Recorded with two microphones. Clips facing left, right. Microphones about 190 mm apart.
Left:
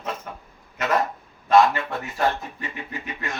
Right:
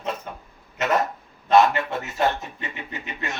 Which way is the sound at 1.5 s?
25° right (ahead or behind).